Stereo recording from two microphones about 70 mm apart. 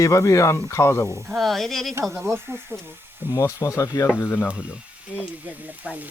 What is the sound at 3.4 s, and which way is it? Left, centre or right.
Speech, left.